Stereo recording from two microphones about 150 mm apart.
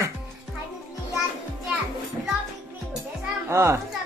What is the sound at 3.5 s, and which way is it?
Speech, 20° right (ahead or behind).